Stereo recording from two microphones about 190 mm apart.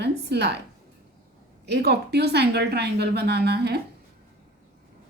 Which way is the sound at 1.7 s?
60° right (ahead or behind).